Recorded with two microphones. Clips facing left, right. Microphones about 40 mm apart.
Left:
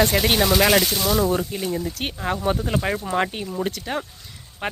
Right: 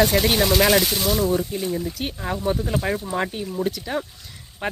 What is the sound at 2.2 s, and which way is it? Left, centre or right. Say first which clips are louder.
Speech: left 1 dB; left.